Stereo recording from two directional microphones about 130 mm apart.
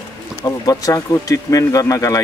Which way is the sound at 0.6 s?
25° left (ahead or behind).